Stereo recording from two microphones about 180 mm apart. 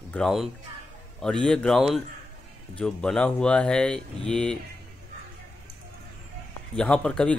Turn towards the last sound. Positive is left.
turn(degrees=5)  # may be behind; listen again after turning